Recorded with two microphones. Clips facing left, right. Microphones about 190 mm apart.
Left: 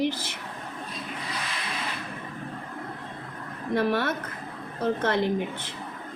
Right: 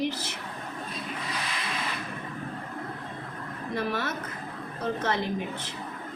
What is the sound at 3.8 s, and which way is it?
A woman's voice, 55° left (ahead or behind).